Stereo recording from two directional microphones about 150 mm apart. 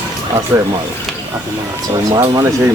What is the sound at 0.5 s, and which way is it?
Speech, 20° right (ahead or behind).